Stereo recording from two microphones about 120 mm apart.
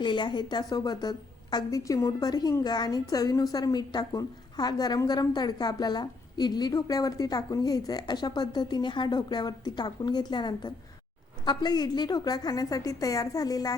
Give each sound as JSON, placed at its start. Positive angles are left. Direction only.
{"t": 0.0, "sound": "a woman's voice", "side_deg": 40}